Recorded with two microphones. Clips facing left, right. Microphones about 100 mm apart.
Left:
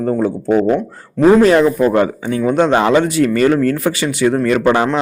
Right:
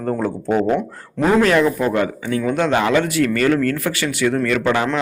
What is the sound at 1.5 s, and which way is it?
Speech, 30° left (ahead or behind).